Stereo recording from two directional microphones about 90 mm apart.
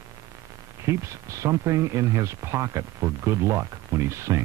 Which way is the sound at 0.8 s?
35° right (ahead or behind).